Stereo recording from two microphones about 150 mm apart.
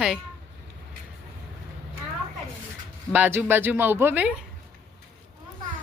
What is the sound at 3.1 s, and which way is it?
Speech, 10° right (ahead or behind).